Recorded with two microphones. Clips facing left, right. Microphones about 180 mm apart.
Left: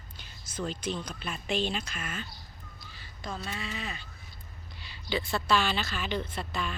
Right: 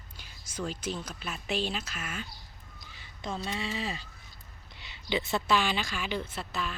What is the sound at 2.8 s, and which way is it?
A woman's voice, 20° right (ahead or behind).